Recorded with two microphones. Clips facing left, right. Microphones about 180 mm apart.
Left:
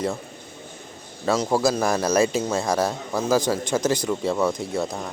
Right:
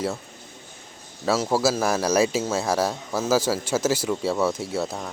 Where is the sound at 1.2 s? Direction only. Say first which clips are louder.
Left 1 dB; centre (ahead or behind).